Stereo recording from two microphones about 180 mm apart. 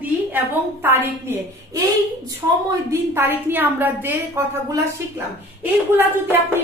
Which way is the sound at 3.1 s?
10° right (ahead or behind).